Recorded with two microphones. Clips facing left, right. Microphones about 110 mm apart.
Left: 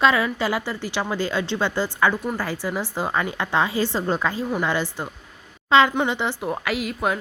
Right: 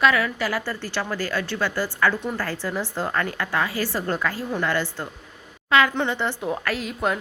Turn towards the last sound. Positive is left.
turn(degrees=5)  # may be behind; listen again after turning